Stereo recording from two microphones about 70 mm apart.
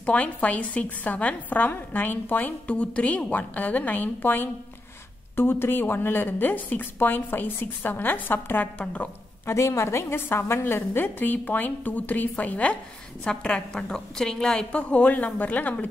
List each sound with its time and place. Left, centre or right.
0.0 s a woman's voice: centre
9.5 s a woman's voice: left